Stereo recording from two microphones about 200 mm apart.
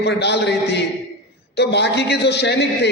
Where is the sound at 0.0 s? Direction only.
55° left (ahead or behind).